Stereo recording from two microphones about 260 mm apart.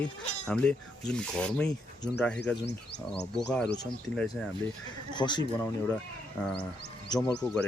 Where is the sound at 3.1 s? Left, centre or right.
Centre.